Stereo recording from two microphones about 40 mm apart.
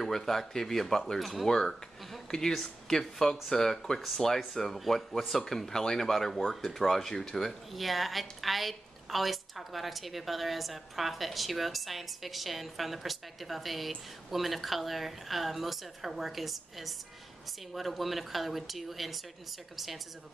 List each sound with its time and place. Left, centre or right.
0.0 s a woman's voice: centre
1.5 s speech: centre
2.0 s speech: centre
7.7 s a woman's voice: centre